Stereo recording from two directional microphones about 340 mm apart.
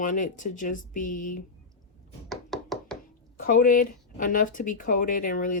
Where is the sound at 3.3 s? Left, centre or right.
Left.